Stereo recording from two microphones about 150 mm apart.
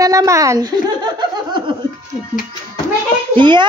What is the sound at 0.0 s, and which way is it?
Speech, 20° right (ahead or behind).